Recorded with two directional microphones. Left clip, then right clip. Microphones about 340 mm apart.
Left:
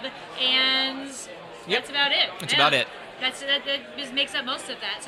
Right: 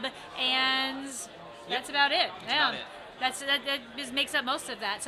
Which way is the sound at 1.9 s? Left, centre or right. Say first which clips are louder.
Left 1 dB; right.